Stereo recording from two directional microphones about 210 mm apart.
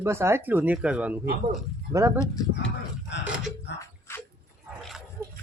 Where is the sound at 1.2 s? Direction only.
45° right (ahead or behind).